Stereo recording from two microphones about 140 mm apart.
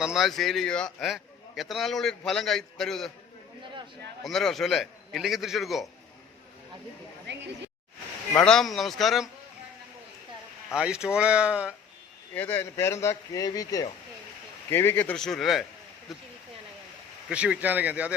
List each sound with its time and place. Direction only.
0.0 s a man's voice: 5° right (ahead or behind)
4.2 s a man's voice: 5° left (ahead or behind)
8.4 s a man's voice: 5° left (ahead or behind)
10.8 s speech: 5° right (ahead or behind)
12.3 s a man's voice: 15° left (ahead or behind); by 18.1 s 10° right (ahead or behind)